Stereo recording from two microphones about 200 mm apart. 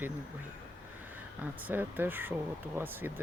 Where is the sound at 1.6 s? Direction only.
10° right (ahead or behind).